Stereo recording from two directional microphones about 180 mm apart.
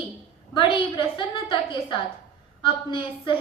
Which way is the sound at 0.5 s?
25° left (ahead or behind).